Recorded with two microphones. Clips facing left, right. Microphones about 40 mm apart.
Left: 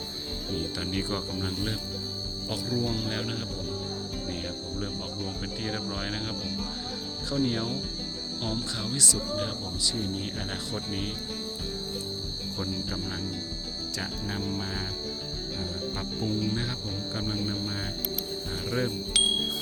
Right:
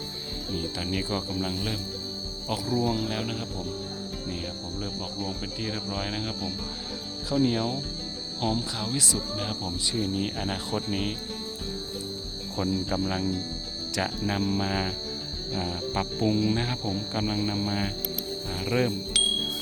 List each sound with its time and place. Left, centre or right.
0.5 s speech: centre
9.7 s speech: right
12.6 s speech: right
13.9 s speech: right
15.5 s music: right
16.5 s speech: right
19.1 s bicycle bell: centre